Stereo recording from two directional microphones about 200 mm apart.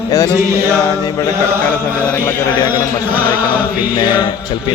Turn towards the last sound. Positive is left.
turn(degrees=20)  # may be behind; listen again after turning